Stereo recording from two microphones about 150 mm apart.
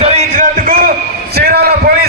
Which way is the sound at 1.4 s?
90° right.